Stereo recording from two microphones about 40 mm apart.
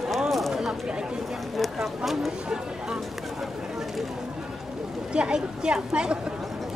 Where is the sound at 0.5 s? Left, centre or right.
Centre.